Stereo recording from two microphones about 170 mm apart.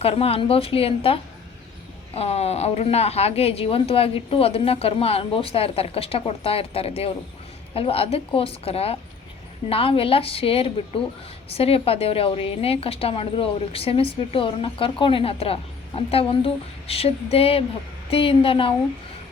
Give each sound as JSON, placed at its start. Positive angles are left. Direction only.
{"t": 0.0, "sound": "speech", "side_deg": 35}